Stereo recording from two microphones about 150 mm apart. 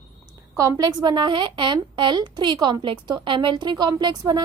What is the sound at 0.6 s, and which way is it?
A woman's voice, 25° right (ahead or behind).